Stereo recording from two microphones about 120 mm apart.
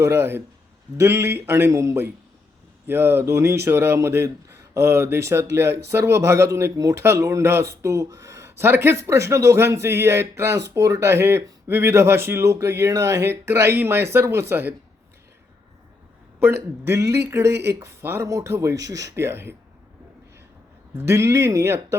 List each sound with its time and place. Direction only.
0.0 s speech: 20° right (ahead or behind)
16.4 s speech: 20° right (ahead or behind)
20.9 s speech: 20° right (ahead or behind)